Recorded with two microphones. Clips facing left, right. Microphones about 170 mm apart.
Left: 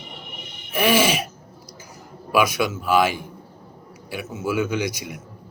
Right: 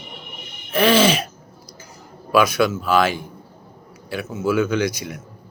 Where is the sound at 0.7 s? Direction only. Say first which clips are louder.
Right 3 dB; 15° left (ahead or behind).